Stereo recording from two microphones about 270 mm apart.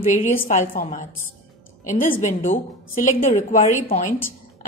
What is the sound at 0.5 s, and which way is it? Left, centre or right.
A woman's voice, left.